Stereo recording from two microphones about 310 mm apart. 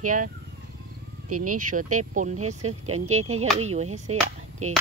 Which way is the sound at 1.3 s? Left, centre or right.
Right.